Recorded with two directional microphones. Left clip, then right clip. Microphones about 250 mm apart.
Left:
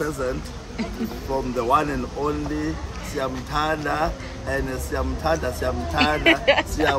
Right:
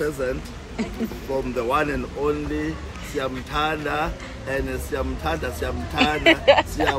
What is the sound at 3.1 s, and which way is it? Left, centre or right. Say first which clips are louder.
Speech: even; centre.